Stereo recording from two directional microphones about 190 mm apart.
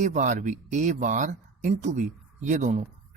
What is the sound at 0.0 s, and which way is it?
Speech, 40° right (ahead or behind).